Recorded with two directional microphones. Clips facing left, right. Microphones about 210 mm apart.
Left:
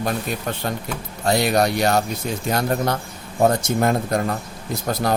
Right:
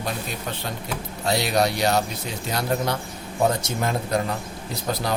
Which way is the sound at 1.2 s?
50° left (ahead or behind).